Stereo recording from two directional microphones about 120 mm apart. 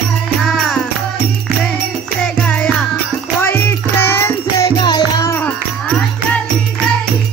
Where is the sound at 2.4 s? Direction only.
10° left (ahead or behind); by 5.3 s 35° left (ahead or behind).